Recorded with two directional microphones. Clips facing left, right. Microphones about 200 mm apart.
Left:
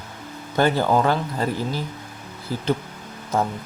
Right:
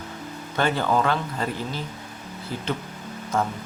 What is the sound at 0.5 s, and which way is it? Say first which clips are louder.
Speech: left 4 dB; 35° left (ahead or behind).